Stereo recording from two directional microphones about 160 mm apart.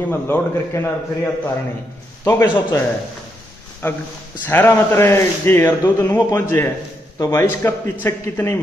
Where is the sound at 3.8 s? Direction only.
15° left (ahead or behind).